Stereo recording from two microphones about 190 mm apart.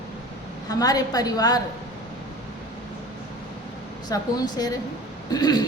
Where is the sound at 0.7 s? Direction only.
20° left (ahead or behind).